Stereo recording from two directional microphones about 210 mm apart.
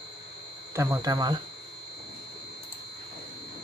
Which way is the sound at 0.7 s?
15° right (ahead or behind).